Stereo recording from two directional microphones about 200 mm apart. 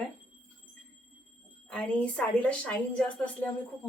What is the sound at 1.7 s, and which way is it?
A woman's voice, 5° left (ahead or behind).